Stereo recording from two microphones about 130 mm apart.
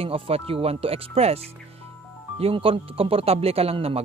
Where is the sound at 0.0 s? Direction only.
45° right (ahead or behind).